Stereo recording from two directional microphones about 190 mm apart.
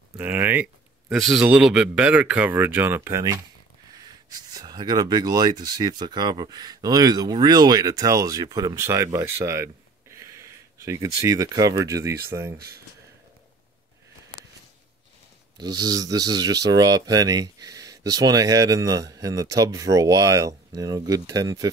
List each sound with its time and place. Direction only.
0.2 s speech: 10° right (ahead or behind)
15.5 s speech: 20° right (ahead or behind)